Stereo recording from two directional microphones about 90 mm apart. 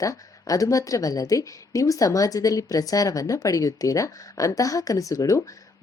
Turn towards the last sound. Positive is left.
turn(degrees=40)  # may be behind; listen again after turning